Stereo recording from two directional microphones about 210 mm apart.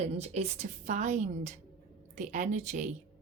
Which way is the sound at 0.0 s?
30° right (ahead or behind).